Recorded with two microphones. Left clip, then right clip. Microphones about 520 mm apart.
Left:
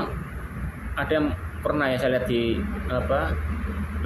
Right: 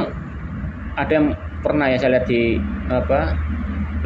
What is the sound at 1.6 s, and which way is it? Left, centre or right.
Speech, left.